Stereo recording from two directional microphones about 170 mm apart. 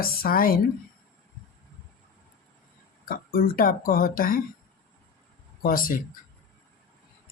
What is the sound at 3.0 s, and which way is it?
Speech, 60° left (ahead or behind).